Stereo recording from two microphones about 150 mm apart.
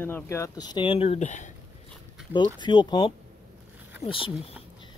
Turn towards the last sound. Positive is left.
turn(degrees=35)  # may be behind; listen again after turning